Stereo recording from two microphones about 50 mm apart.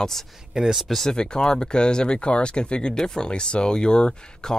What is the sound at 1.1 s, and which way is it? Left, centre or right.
Speech, centre.